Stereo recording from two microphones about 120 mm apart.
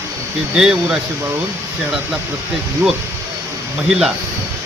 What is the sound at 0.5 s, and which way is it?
Speech, 5° right (ahead or behind).